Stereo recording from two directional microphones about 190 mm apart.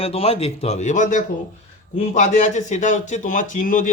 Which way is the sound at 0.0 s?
30° left (ahead or behind).